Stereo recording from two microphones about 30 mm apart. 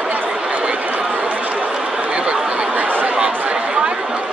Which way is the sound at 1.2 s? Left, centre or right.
Right.